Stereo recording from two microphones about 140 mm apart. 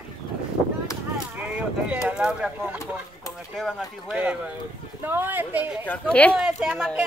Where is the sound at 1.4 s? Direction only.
10° right (ahead or behind).